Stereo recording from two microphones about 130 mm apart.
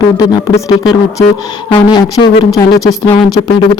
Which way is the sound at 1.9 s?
35° left (ahead or behind).